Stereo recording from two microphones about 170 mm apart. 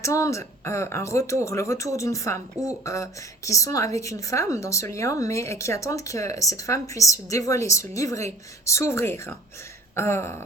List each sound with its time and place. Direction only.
0.0 s a woman's voice: 20° left (ahead or behind)